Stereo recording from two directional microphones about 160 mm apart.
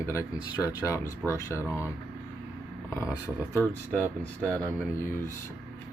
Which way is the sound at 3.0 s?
10° right (ahead or behind).